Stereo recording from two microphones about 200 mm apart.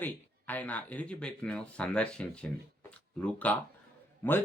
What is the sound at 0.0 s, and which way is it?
Speech, 10° left (ahead or behind).